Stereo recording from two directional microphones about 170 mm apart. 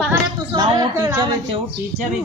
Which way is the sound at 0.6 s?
25° right (ahead or behind).